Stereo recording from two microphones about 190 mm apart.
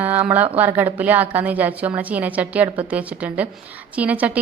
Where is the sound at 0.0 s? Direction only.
10° right (ahead or behind).